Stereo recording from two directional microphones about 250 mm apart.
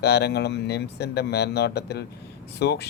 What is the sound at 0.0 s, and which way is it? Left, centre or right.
Speech, left.